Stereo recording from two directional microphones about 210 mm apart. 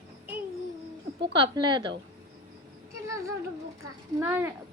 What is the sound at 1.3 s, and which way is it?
Speech, 20° right (ahead or behind).